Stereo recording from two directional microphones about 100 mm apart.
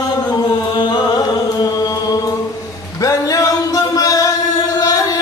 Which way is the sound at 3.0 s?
35° left (ahead or behind).